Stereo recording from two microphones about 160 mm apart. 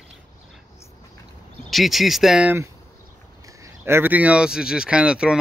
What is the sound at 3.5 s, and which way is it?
Speech, 15° right (ahead or behind).